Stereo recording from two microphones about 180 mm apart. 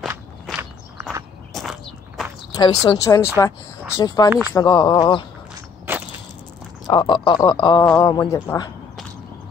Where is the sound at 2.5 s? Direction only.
25° left (ahead or behind).